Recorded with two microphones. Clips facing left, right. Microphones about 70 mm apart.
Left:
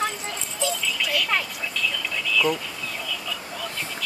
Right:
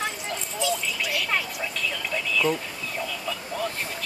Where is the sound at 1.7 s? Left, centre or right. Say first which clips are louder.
Left 2 dB; right.